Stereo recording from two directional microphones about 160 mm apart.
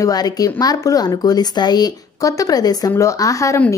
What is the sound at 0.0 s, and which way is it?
A woman's voice, 25° left (ahead or behind).